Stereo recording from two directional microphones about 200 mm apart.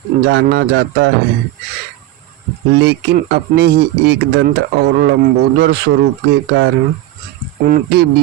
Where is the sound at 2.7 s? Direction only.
55° right (ahead or behind).